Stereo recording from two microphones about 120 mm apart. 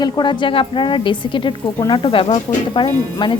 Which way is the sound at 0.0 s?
40° left (ahead or behind).